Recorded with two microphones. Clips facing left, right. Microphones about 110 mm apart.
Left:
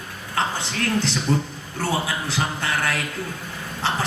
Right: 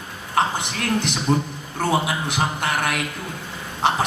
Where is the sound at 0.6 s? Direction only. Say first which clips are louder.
Even; 15° right (ahead or behind).